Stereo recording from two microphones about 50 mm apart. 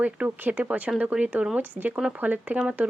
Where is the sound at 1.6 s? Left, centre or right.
Right.